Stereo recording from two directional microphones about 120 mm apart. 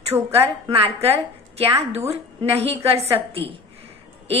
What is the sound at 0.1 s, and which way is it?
A woman's voice, 60° right (ahead or behind).